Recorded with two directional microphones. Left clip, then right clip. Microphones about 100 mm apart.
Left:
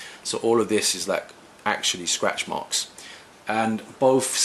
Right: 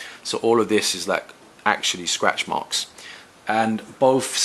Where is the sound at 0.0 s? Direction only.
20° right (ahead or behind).